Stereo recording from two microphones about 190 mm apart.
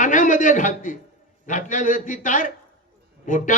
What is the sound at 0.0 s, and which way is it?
Speech, 40° left (ahead or behind).